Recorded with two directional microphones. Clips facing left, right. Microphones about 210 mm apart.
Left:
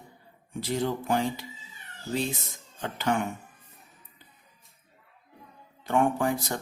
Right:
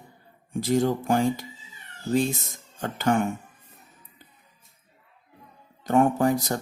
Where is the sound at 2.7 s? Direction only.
45° right (ahead or behind).